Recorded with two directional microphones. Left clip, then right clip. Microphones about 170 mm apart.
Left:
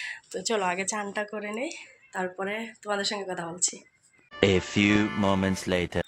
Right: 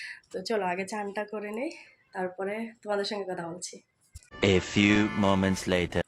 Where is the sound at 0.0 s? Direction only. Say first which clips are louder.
Left 4 dB; 5° right (ahead or behind).